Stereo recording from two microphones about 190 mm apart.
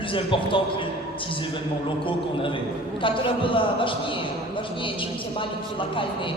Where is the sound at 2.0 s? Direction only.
25° left (ahead or behind).